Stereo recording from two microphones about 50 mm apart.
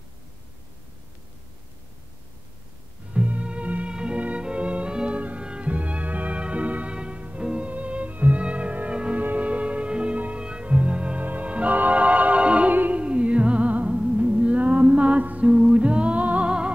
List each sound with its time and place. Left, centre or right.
3.1 s music: right
5.4 s violin: centre
5.7 s music: right
11.2 s organ: right
11.7 s music: right
13.0 s music: right
13.9 s music: centre
15.5 s music: centre
15.8 s music: right